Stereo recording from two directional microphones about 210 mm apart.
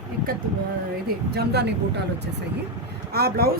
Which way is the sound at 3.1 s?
45° right (ahead or behind).